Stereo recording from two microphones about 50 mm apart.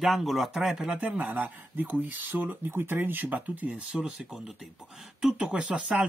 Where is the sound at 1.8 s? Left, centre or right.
Right.